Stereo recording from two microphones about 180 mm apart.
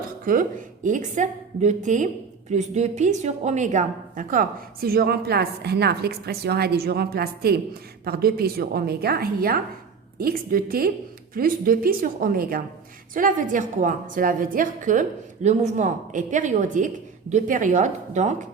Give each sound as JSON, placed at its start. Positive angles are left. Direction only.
{"t": 0.3, "sound": "a woman's voice", "side_deg": -45}